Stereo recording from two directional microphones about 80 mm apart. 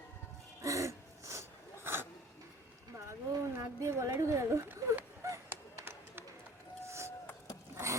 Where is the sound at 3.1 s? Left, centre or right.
Right.